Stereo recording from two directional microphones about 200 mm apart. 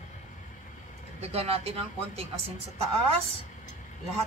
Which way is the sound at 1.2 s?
30° right (ahead or behind).